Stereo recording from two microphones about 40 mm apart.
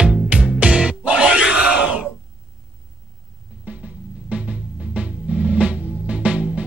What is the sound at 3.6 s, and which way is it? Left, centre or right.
Music, right.